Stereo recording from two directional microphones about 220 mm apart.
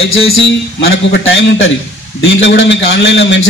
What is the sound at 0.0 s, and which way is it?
A man's voice, 65° left (ahead or behind).